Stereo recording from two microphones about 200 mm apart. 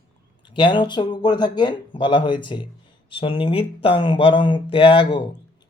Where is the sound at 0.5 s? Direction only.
25° left (ahead or behind).